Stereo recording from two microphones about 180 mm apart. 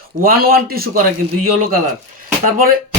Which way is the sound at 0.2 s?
55° right (ahead or behind).